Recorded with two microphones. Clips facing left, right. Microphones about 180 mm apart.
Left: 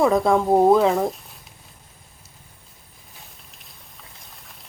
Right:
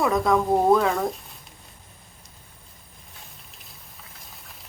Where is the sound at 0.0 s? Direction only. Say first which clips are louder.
Left 3 dB; 25° left (ahead or behind).